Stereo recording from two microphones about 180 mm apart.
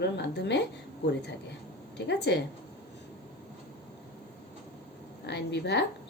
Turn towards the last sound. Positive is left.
turn(degrees=70)  # may be behind; listen again after turning